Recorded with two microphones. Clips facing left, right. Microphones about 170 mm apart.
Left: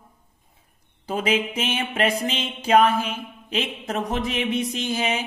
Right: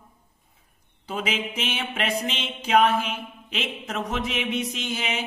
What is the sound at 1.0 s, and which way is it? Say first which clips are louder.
A woman's voice: left 5 dB; 45° left (ahead or behind).